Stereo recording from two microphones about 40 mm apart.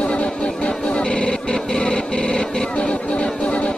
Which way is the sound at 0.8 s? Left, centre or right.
Left.